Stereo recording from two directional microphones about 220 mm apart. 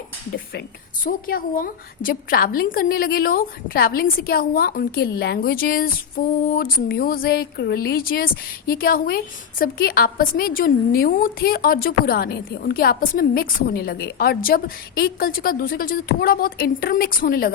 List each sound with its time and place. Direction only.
1.0 s a woman's voice: 40° left (ahead or behind)